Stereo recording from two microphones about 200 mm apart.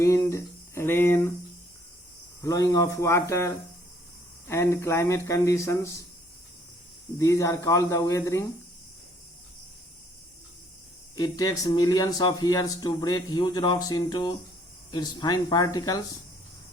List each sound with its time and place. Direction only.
0.0 s speech: 15° left (ahead or behind)
2.4 s speech: 15° left (ahead or behind)
7.2 s speech: 15° left (ahead or behind)
11.1 s speech: 20° left (ahead or behind)